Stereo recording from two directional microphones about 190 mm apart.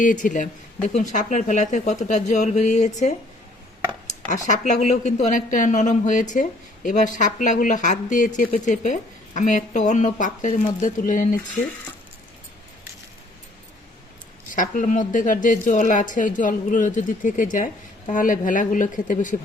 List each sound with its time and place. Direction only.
0.0 s a woman's voice: 45° left (ahead or behind)
14.5 s a woman's voice: 45° left (ahead or behind)